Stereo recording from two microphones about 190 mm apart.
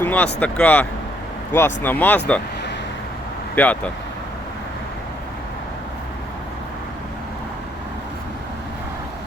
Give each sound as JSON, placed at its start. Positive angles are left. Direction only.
{"t": 0.0, "sound": "vehicle", "side_deg": 10}
{"t": 0.3, "sound": "speech", "side_deg": 5}
{"t": 3.5, "sound": "speech", "side_deg": 10}